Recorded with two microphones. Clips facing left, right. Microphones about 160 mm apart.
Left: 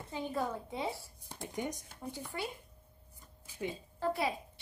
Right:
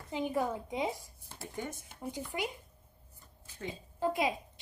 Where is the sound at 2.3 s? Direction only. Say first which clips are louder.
Right 3 dB; 15° right (ahead or behind).